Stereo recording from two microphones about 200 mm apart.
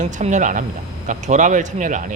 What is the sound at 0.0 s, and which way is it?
A man's voice, 35° right (ahead or behind).